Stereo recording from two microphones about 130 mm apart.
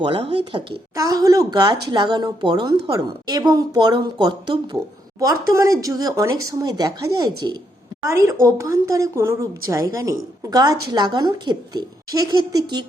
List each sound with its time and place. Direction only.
0.0 s speech: 50° right (ahead or behind)
0.9 s speech: 30° right (ahead or behind)
5.2 s speech: 25° right (ahead or behind)